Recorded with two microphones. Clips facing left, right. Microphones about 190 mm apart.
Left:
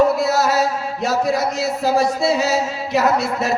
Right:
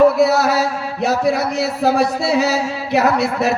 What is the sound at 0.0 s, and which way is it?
Chant, 60° right (ahead or behind).